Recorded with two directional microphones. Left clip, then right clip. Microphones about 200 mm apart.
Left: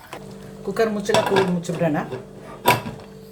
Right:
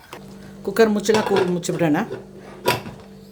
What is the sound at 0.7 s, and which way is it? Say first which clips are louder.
Speech: right 3 dB; 60° right (ahead or behind).